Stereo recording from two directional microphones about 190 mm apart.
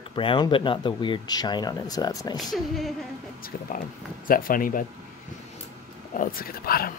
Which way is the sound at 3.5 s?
50° left (ahead or behind).